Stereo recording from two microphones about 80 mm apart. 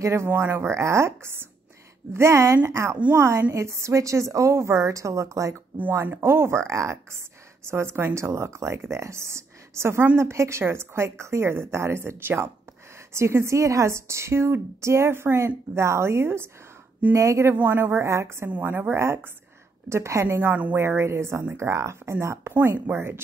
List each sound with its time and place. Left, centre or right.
0.0 s speech: right
5.8 s speech: right
17.6 s a woman's voice: right